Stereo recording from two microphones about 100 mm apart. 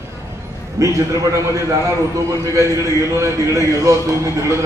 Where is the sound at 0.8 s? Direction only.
30° right (ahead or behind).